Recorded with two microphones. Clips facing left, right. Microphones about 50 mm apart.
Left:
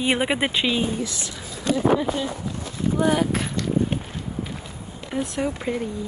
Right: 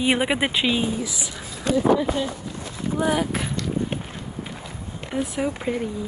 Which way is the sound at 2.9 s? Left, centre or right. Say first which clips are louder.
Left 1 dB; centre.